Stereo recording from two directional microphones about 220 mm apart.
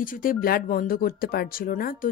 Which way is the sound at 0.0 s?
40° left (ahead or behind).